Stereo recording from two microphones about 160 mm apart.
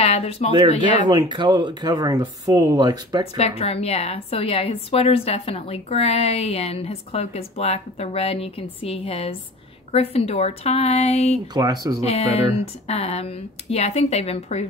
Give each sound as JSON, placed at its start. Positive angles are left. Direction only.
{"t": 0.0, "sound": "a woman's voice", "side_deg": 40}
{"t": 1.0, "sound": "speech", "side_deg": -30}
{"t": 3.3, "sound": "a woman's voice", "side_deg": 40}
{"t": 11.5, "sound": "speech", "side_deg": -25}
{"t": 12.0, "sound": "a woman's voice", "side_deg": 40}